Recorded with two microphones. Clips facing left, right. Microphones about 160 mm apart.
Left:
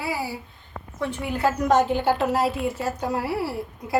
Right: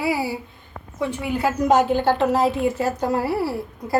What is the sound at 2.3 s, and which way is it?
A woman's voice, 5° left (ahead or behind).